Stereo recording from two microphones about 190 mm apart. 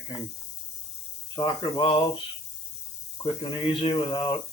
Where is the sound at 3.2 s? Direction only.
25° left (ahead or behind).